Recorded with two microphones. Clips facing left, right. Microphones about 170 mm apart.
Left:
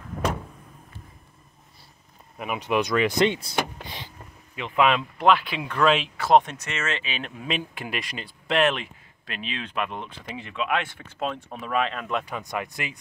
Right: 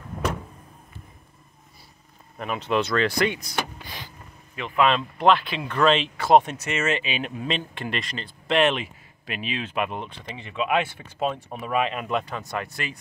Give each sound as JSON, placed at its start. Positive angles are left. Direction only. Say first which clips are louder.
{"t": 2.3, "sound": "speech", "louder": "even", "side_deg": 10}
{"t": 3.8, "sound": "vehicle", "louder": "left 1 dB", "side_deg": 25}
{"t": 4.6, "sound": "speech", "louder": "even", "side_deg": 15}
{"t": 7.3, "sound": "speech", "louder": "right 1 dB", "side_deg": 5}
{"t": 12.2, "sound": "speech", "louder": "even", "side_deg": 15}